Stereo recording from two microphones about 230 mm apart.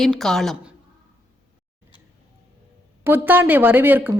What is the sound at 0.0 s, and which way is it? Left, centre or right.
Speech, centre.